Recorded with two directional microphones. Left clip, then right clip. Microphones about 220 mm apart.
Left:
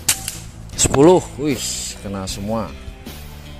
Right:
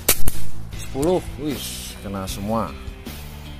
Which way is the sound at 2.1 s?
10° left (ahead or behind).